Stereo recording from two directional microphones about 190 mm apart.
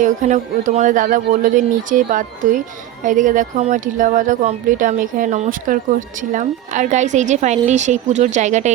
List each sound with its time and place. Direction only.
0.0 s a woman's voice: 40° right (ahead or behind)